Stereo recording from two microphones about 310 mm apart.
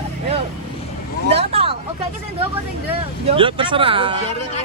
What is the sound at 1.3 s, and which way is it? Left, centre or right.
Vehicle, centre.